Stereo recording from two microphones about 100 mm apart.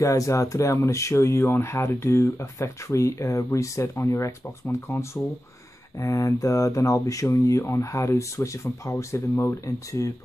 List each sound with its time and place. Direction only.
0.0 s speech: 30° left (ahead or behind)